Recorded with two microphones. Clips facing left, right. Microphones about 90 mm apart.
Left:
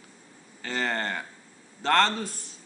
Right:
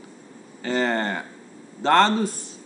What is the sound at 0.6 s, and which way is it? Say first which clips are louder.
A man's voice: right 6 dB; 10° right (ahead or behind).